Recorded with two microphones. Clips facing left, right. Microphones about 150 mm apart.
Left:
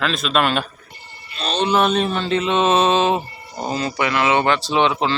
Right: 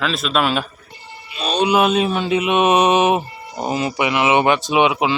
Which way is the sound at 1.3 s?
10° right (ahead or behind).